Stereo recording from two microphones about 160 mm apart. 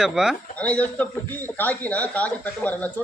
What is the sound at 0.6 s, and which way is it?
Speech, 10° left (ahead or behind).